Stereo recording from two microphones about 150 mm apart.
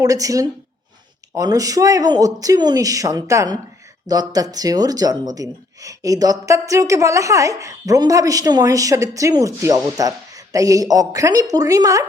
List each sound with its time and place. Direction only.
0.0 s speech: 25° right (ahead or behind)